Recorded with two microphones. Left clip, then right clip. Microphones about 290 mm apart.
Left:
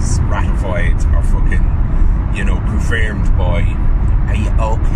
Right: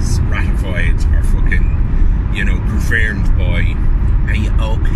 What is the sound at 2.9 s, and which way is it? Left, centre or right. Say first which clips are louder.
Speech: right 4 dB; left.